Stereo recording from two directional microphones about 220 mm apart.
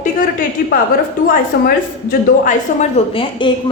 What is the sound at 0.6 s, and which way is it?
A woman's voice, 45° left (ahead or behind).